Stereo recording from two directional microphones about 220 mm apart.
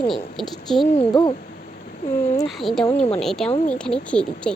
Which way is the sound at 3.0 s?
25° left (ahead or behind).